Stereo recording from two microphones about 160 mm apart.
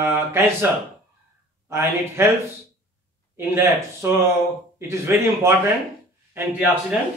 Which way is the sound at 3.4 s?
15° right (ahead or behind).